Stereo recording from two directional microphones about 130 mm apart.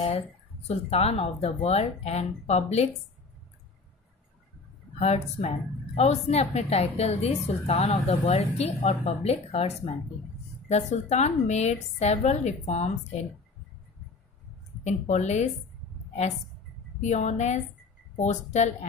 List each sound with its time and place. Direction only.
0.7 s a woman's voice: 50° left (ahead or behind)
4.9 s a woman's voice: 55° left (ahead or behind)
14.8 s a woman's voice: 65° left (ahead or behind)
17.0 s a woman's voice: 65° left (ahead or behind)